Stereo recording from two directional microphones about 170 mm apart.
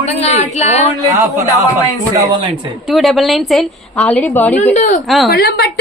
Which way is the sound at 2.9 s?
Centre (ahead or behind).